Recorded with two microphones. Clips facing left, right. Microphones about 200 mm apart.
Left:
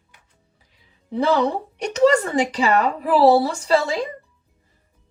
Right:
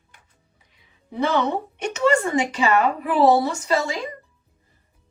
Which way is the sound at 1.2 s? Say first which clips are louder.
Left 2 dB; 35° left (ahead or behind).